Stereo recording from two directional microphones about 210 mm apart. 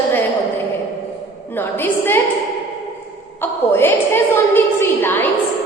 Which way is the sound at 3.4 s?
10° left (ahead or behind).